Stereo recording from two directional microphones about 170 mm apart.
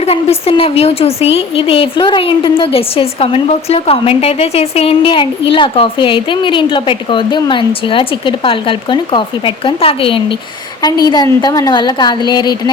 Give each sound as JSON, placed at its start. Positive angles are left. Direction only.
{"t": 0.0, "sound": "a woman's voice", "side_deg": 35}